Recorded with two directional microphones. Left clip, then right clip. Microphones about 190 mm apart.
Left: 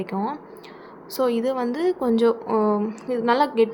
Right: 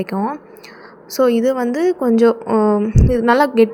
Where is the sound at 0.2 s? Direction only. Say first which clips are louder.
Right 5 dB; 20° right (ahead or behind).